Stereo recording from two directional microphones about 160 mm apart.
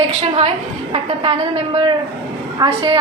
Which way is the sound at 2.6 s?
30° right (ahead or behind).